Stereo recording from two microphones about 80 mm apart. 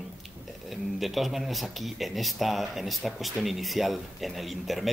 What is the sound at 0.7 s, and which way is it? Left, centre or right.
Speech, centre.